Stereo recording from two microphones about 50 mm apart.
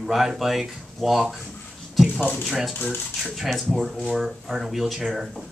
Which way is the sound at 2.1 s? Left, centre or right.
Left.